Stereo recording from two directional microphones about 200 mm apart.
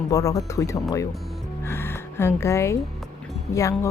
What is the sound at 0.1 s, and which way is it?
A woman's voice, 15° left (ahead or behind).